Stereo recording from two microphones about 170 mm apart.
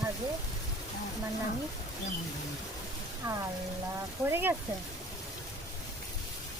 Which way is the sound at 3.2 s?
20° right (ahead or behind).